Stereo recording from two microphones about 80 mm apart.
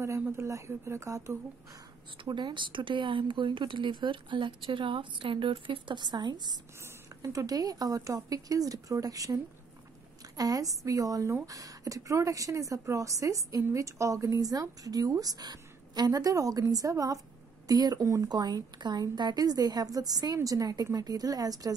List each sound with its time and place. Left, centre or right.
0.4 s speech: right
2.2 s speech: right
7.2 s a woman's voice: right
18.3 s a woman's voice: right